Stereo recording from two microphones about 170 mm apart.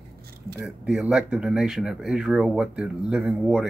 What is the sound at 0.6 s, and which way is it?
Speech, 5° right (ahead or behind).